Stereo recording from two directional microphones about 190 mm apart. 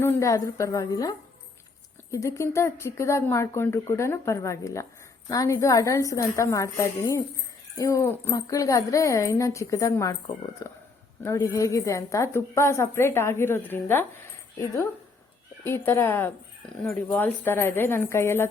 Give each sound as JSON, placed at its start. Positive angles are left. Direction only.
{"t": 0.0, "sound": "speech", "side_deg": 15}
{"t": 15.6, "sound": "speech", "side_deg": 15}